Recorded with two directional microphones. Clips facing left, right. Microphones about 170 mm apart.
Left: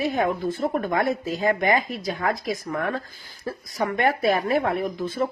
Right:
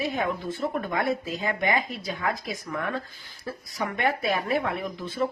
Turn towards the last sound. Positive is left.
turn(degrees=45)  # may be behind; listen again after turning